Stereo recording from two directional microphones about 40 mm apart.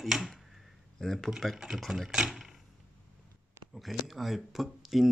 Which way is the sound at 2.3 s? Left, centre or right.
Centre.